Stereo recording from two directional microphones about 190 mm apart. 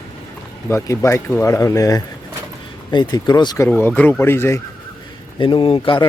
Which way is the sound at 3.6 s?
5° left (ahead or behind).